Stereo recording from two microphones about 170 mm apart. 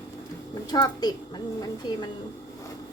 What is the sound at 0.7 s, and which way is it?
Speech, 25° left (ahead or behind).